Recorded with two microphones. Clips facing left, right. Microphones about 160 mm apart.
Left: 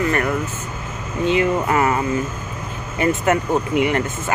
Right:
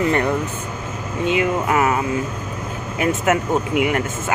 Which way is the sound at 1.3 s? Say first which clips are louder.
Left 1 dB; 10° right (ahead or behind).